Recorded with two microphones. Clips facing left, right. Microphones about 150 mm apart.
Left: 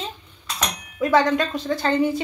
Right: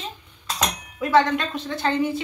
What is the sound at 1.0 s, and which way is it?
A woman's voice, 40° left (ahead or behind).